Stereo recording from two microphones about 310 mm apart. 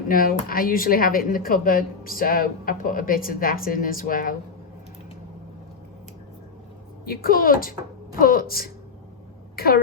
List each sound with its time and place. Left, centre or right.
0.1 s speech: left
7.0 s speech: left